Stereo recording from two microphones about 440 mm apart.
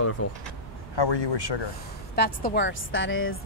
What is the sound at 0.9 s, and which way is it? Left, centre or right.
Speech, left.